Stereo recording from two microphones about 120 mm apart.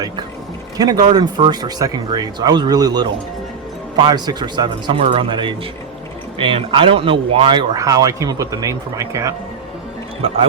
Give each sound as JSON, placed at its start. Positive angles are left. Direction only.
{"t": 0.8, "sound": "speech", "side_deg": -30}
{"t": 7.8, "sound": "speech", "side_deg": -30}